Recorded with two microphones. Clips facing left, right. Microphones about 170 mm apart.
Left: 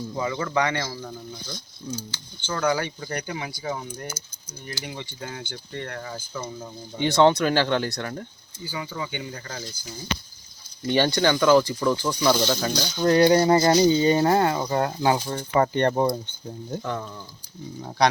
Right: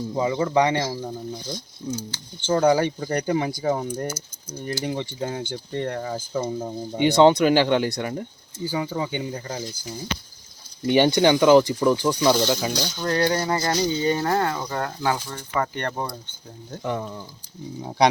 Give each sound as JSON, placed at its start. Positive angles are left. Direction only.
{"t": 0.1, "sound": "speech", "side_deg": -20}
{"t": 6.9, "sound": "speech", "side_deg": -15}
{"t": 8.6, "sound": "speech", "side_deg": -40}
{"t": 9.3, "sound": "speech", "side_deg": -20}
{"t": 10.8, "sound": "speech", "side_deg": -15}
{"t": 13.0, "sound": "speech", "side_deg": 20}
{"t": 16.8, "sound": "speech", "side_deg": -15}